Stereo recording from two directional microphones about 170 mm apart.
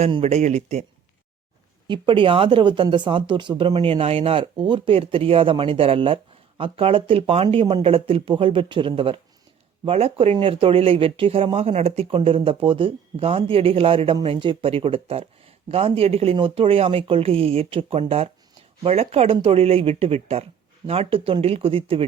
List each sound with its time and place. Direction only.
0.0 s speech: 35° right (ahead or behind)
1.9 s speech: 30° right (ahead or behind)